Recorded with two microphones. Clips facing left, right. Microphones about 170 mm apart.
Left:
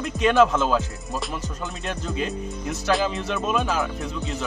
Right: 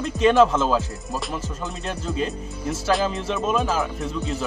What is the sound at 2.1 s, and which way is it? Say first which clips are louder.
Speech: right 1 dB; 35° right (ahead or behind).